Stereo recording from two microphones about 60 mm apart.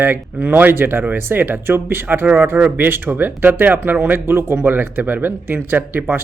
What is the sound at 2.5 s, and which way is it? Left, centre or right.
Speech, right.